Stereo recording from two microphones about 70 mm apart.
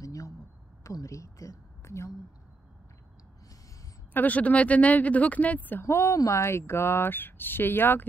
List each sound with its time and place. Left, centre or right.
0.0 s a sound: left
0.8 s a woman's voice: left
4.1 s speech: left
5.9 s speech: left